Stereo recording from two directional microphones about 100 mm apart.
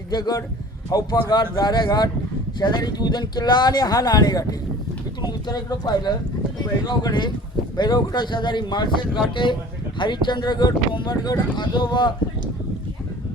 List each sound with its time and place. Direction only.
0.1 s a man's voice: 40° left (ahead or behind)
5.5 s speech: 40° left (ahead or behind)